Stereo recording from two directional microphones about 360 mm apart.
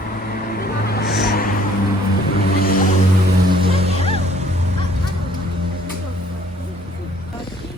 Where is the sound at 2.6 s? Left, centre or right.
Left.